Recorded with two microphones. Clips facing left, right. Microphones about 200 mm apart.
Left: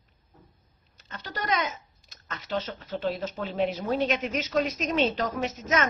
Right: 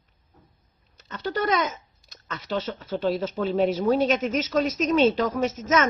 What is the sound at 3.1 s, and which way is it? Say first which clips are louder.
A woman's voice: right 6 dB; 40° right (ahead or behind).